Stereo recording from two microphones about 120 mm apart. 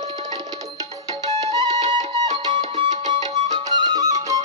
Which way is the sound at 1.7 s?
70° right (ahead or behind).